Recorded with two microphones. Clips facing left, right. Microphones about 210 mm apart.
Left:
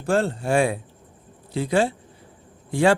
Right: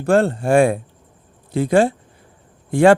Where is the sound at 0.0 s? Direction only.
60° right (ahead or behind).